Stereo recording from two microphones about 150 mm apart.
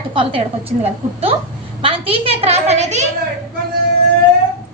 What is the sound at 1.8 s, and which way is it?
A child's voice, 40° right (ahead or behind).